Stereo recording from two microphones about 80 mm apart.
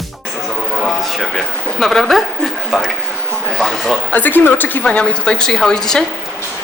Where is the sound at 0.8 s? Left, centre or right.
Centre.